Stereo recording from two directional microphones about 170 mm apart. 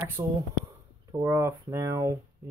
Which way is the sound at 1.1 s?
15° right (ahead or behind).